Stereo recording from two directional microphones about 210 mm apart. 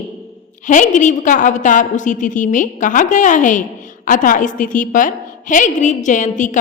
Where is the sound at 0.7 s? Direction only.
35° left (ahead or behind).